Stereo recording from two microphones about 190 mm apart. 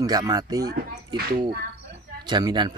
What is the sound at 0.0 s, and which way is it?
Speech, 20° right (ahead or behind).